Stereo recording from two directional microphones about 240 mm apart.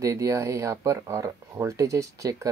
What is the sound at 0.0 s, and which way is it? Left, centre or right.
Speech, centre.